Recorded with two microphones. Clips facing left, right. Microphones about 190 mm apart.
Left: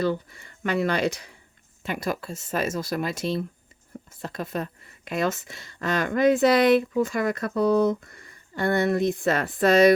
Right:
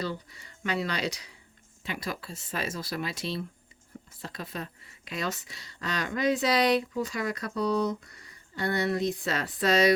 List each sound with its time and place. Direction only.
0.0 s speech: 50° left (ahead or behind)